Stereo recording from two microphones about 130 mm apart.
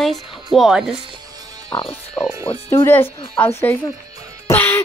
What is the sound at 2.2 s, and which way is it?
Speech, 20° left (ahead or behind).